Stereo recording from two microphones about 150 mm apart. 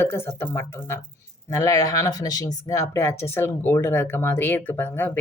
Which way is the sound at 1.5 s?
20° left (ahead or behind).